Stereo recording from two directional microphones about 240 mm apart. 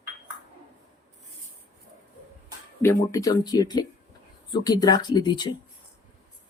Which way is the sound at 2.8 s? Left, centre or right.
Centre.